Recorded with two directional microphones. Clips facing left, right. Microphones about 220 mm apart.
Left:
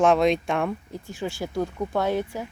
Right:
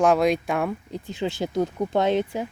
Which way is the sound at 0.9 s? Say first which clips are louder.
Right 3 dB; 20° right (ahead or behind).